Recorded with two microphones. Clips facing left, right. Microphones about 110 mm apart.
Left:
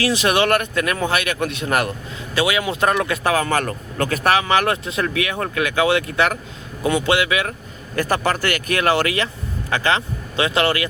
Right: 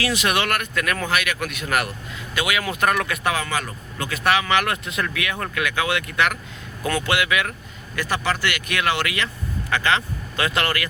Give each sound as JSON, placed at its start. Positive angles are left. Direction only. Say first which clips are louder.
{"t": 0.0, "sound": "speech", "louder": "left 5 dB", "side_deg": 30}
{"t": 3.3, "sound": "speech", "louder": "left 6 dB", "side_deg": 45}
{"t": 6.8, "sound": "speech", "louder": "left 4 dB", "side_deg": 20}
{"t": 7.9, "sound": "speech", "louder": "left 4 dB", "side_deg": 45}